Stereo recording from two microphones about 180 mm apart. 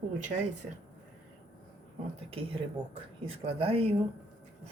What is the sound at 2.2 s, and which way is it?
Speech, 30° right (ahead or behind).